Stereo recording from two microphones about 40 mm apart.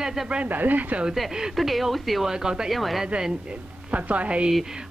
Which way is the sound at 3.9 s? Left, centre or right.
Right.